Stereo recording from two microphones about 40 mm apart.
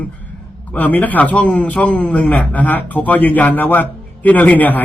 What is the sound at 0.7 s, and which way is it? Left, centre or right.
A man's voice, left.